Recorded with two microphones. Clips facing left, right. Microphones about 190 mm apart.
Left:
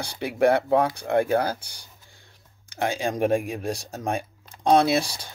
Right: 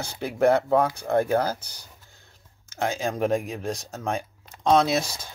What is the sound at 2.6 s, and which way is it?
Speech, 15° left (ahead or behind).